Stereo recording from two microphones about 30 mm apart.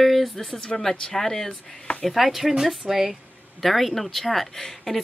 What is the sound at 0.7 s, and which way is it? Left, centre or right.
Speech, centre.